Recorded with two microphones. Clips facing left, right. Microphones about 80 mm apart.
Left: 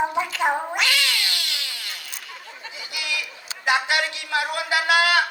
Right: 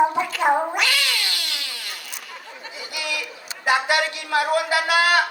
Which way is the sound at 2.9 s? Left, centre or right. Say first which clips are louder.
Right 1 dB; right.